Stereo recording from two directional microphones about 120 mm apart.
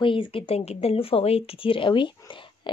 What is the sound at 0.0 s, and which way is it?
A woman's voice, 45° left (ahead or behind).